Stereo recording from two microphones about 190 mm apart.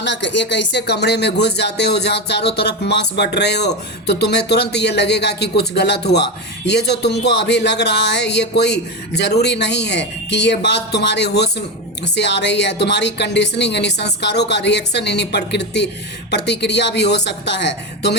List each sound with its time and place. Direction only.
0.0 s speech: 70° left (ahead or behind)